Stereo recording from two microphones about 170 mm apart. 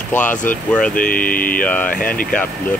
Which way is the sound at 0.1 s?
10° left (ahead or behind).